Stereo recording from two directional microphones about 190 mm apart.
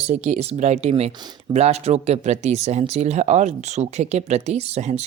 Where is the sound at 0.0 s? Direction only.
35° right (ahead or behind).